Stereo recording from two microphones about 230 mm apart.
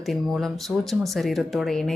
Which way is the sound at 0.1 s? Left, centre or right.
Centre.